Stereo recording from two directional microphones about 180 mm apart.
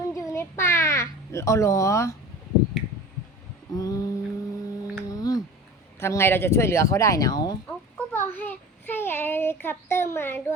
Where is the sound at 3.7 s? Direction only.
20° left (ahead or behind).